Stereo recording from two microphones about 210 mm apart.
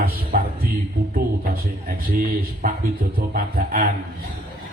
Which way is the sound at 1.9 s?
40° right (ahead or behind).